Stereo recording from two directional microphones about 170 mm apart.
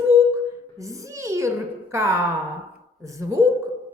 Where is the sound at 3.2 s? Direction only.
20° right (ahead or behind).